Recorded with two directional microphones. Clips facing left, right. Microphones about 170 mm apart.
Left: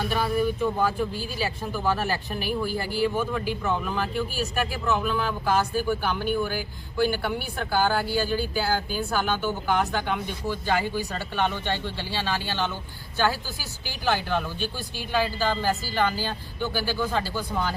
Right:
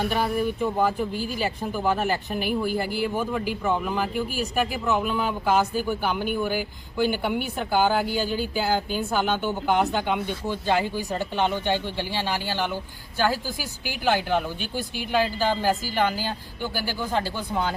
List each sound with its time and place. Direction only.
0.1 s speech: 10° right (ahead or behind)